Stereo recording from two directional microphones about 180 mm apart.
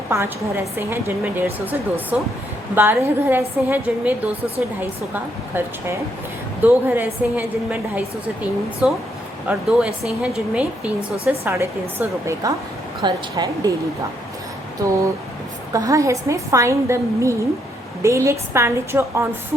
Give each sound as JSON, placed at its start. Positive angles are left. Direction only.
{"t": 0.1, "sound": "a woman's voice", "side_deg": -15}
{"t": 5.5, "sound": "a woman's voice", "side_deg": -10}
{"t": 14.8, "sound": "a woman's voice", "side_deg": -20}